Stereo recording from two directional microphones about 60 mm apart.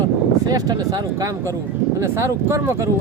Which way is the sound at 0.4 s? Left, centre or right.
Right.